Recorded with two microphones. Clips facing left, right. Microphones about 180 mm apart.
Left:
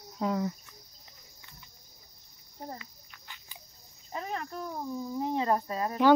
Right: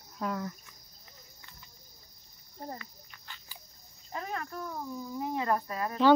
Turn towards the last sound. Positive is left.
turn(degrees=25)  # may be behind; listen again after turning